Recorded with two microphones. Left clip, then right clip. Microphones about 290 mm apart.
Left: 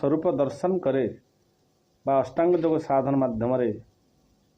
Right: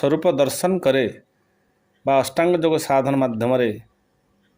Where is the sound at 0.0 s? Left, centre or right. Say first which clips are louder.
Right 6 dB; right.